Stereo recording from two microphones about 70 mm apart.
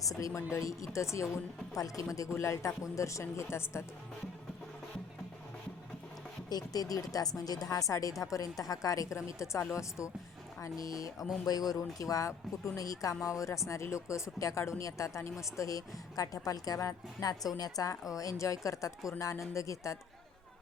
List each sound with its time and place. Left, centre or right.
0.0 s speech: left
6.5 s speech: left
10.6 s speech: left
11.4 s speech: left